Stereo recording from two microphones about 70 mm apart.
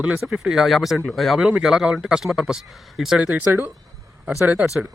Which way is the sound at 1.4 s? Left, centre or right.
Centre.